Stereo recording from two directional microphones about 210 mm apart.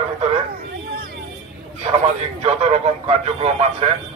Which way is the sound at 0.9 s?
45° right (ahead or behind).